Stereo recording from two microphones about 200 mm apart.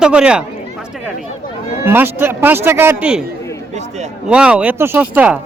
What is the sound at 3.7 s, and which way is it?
Speech, 35° right (ahead or behind).